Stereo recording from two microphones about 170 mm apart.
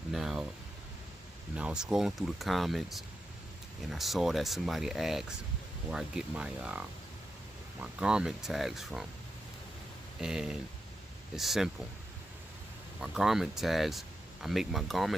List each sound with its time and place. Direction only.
0.1 s a sound: centre (ahead or behind)
1.5 s speech: 5° right (ahead or behind)
7.8 s speech: 5° right (ahead or behind)
10.2 s speech: 5° right (ahead or behind)
13.0 s speech: centre (ahead or behind)